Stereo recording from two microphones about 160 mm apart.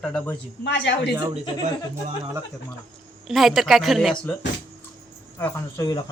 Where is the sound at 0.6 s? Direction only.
90° left.